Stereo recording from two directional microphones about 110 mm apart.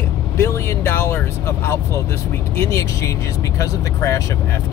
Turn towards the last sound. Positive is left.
turn(degrees=30)  # may be behind; listen again after turning